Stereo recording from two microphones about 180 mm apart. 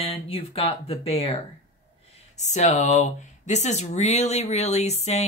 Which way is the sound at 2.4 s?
40° left (ahead or behind).